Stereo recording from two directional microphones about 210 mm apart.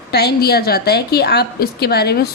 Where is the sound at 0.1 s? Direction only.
50° left (ahead or behind).